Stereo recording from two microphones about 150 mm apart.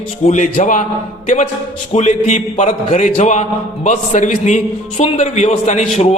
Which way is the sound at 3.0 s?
50° left (ahead or behind).